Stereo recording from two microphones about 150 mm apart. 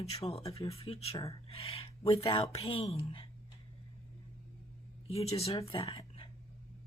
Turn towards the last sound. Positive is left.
turn(degrees=40)  # may be behind; listen again after turning